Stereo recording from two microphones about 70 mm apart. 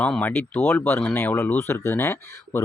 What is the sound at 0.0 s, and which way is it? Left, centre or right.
Speech, left.